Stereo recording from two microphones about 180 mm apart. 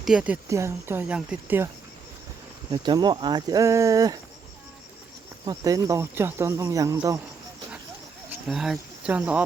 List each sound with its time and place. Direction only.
0.0 s speech: 5° right (ahead or behind)
0.4 s speech: 15° right (ahead or behind)
2.7 s speech: 25° right (ahead or behind)
5.5 s speech: 20° right (ahead or behind)
8.3 s speech: centre (ahead or behind)